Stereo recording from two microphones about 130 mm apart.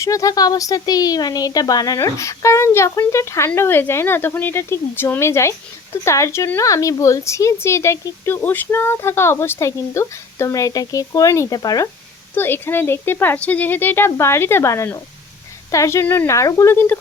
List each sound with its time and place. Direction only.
0.0 s speech: 25° left (ahead or behind)
12.3 s speech: 15° left (ahead or behind)